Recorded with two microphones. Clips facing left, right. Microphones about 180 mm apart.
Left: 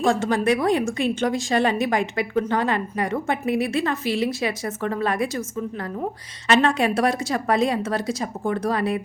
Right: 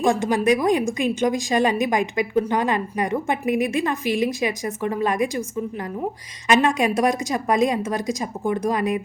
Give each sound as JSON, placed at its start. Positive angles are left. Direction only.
{"t": 0.0, "sound": "a woman's voice", "side_deg": -15}
{"t": 6.5, "sound": "a woman's voice", "side_deg": -15}